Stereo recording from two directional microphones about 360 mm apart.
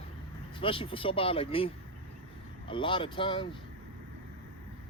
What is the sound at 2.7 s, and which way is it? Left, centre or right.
Speech, centre.